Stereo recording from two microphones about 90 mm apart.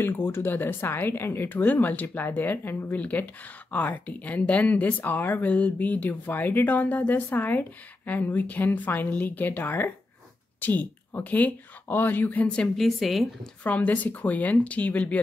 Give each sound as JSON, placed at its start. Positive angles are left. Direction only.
{"t": 0.0, "sound": "speech", "side_deg": 25}
{"t": 12.8, "sound": "speech", "side_deg": 0}
{"t": 13.7, "sound": "speech", "side_deg": 15}